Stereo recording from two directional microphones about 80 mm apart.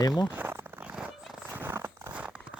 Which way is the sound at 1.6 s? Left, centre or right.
Right.